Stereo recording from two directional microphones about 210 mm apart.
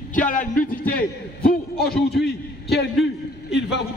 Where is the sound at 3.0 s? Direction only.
55° left (ahead or behind).